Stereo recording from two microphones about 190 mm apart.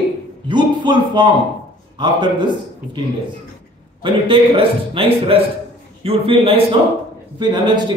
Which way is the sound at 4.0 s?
25° right (ahead or behind).